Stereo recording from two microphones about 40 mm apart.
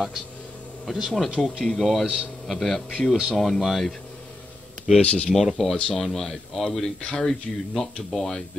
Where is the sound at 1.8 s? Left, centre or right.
Centre.